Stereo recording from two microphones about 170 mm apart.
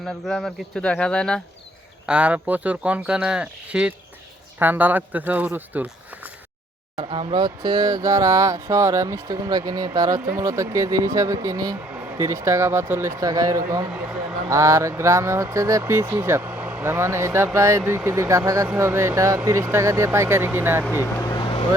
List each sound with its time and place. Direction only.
0.0 s speech: centre (ahead or behind)
2.0 s speech: 5° right (ahead or behind)
6.9 s speech: 35° right (ahead or behind)
11.9 s speech: 10° right (ahead or behind)
13.9 s a sound: 5° right (ahead or behind)
14.5 s speech: 20° right (ahead or behind)
21.2 s vehicle: 25° left (ahead or behind)